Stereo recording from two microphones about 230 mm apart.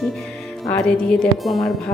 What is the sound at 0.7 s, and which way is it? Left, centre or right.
A woman's voice, centre.